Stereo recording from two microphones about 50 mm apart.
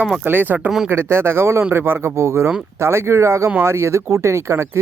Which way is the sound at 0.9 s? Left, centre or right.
Right.